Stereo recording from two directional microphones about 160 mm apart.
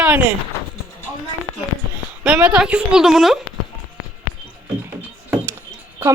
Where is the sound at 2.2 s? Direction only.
5° right (ahead or behind).